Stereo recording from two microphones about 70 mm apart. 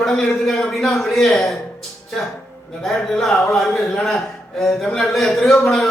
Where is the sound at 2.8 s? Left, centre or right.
Centre.